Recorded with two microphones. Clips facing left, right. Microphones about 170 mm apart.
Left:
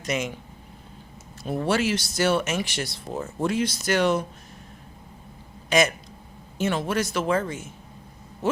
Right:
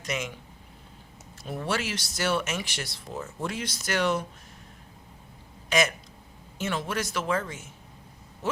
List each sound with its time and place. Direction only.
0.0 s speech: 25° left (ahead or behind)
1.5 s speech: 30° left (ahead or behind)
6.7 s speech: 30° left (ahead or behind)